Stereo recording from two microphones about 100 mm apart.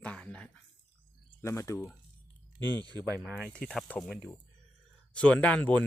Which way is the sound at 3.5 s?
10° left (ahead or behind).